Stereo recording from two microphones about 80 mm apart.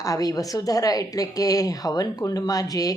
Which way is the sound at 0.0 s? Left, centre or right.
Left.